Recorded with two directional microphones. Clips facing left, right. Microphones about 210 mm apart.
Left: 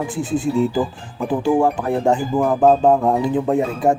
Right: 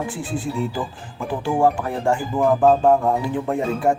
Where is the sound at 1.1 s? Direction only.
15° left (ahead or behind).